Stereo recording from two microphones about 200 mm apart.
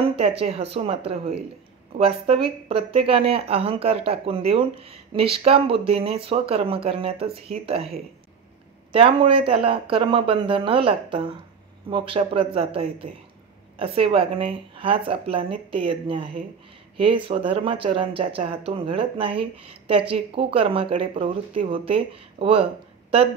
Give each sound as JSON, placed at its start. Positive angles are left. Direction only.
{"t": 0.4, "sound": "speech", "side_deg": -30}